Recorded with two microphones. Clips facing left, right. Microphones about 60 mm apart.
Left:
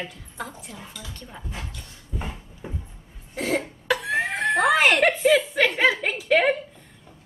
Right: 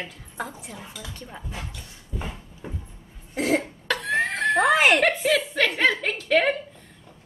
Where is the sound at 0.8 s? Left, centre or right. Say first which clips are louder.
Right 1 dB; centre.